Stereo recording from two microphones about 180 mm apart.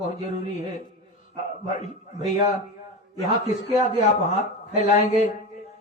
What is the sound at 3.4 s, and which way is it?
A man's voice, 40° left (ahead or behind).